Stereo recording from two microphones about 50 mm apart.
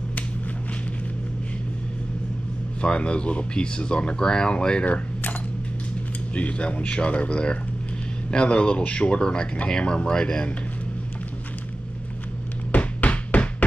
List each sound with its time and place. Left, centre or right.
2.8 s speech: left
4.8 s speech: left
6.3 s speech: left
12.7 s music: left